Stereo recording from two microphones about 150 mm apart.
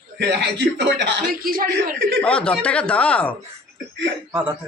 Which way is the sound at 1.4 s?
75° right (ahead or behind).